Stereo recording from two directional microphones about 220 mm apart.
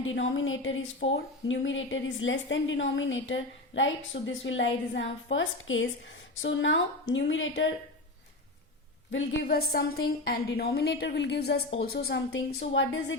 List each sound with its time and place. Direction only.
0.0 s speech: 60° left (ahead or behind)
9.4 s a woman's voice: 45° left (ahead or behind)